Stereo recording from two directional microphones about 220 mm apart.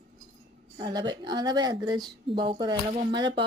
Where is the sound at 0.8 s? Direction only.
20° right (ahead or behind).